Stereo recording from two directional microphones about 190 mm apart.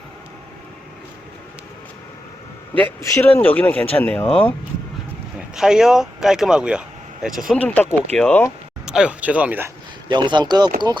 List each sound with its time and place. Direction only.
2.7 s speech: 10° left (ahead or behind)
5.5 s speech: 5° right (ahead or behind)
8.9 s speech: 5° right (ahead or behind)
10.1 s speech: 25° right (ahead or behind)